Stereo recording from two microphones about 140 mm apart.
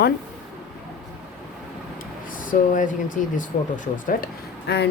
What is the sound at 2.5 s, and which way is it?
Speech, 70° left (ahead or behind).